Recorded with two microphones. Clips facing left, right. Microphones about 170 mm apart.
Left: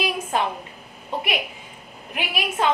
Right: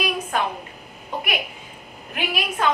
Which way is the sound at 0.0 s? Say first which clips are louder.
Even; 25° left (ahead or behind).